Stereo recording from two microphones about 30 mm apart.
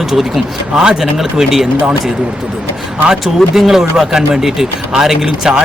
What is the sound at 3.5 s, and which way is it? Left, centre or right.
Speech, centre.